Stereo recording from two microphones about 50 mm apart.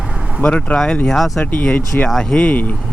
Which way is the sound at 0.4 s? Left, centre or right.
Left.